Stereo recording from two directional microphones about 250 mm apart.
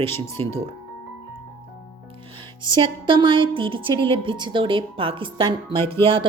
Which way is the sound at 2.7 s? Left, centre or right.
Centre.